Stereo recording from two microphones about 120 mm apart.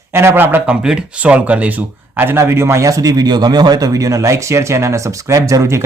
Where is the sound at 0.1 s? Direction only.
20° right (ahead or behind).